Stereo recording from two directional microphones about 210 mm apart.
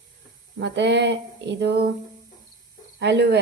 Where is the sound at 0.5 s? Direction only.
55° right (ahead or behind).